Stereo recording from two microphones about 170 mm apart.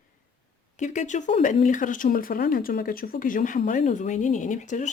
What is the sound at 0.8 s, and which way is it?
Speech, 45° left (ahead or behind).